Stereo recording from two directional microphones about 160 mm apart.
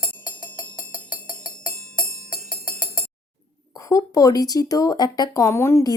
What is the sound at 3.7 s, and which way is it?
Speech, 20° left (ahead or behind).